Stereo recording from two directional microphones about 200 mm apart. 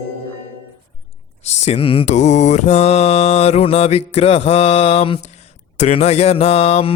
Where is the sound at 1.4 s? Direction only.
35° left (ahead or behind).